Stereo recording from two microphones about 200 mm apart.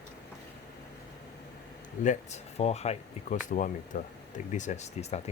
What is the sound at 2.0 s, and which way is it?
Speech, 35° left (ahead or behind).